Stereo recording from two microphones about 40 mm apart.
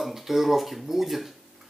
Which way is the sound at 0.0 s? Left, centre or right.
Centre.